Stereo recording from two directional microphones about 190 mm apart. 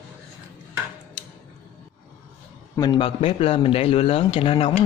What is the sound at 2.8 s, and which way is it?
A man's voice, 25° left (ahead or behind).